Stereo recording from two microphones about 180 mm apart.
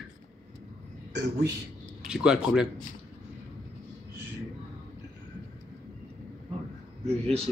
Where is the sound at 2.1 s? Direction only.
5° right (ahead or behind).